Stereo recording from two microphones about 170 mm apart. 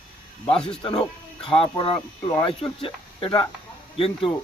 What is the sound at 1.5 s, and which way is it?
Speech, 30° left (ahead or behind).